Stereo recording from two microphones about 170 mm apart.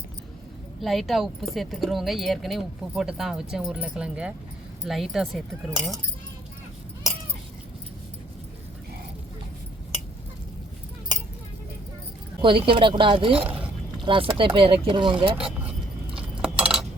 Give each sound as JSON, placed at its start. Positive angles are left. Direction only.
{"t": 0.8, "sound": "speech", "side_deg": 0}
{"t": 12.4, "sound": "speech", "side_deg": -30}
{"t": 15.4, "sound": "speech", "side_deg": 0}
{"t": 16.6, "sound": "chink", "side_deg": -5}